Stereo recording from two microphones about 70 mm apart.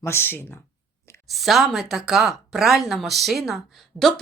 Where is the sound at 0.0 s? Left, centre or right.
Left.